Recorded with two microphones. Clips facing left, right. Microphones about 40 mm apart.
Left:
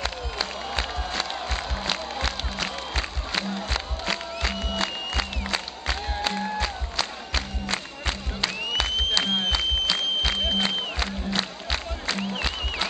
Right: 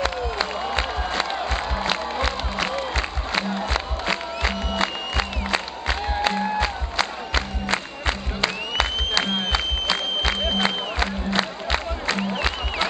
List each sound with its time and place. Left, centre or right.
0.0 s crowd: centre
3.3 s music: centre